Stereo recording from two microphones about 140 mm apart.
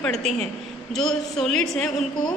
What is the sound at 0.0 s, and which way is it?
A woman's voice, 5° left (ahead or behind).